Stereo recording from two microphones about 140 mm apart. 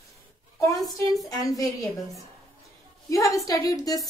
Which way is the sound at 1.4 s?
25° left (ahead or behind).